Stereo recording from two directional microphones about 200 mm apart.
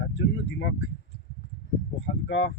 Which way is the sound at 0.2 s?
65° left (ahead or behind).